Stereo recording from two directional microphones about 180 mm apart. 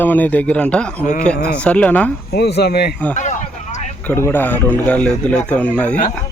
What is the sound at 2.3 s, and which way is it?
Speech, 65° left (ahead or behind).